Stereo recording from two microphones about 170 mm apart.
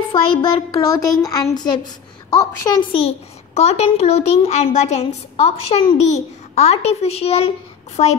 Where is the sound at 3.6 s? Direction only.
40° left (ahead or behind).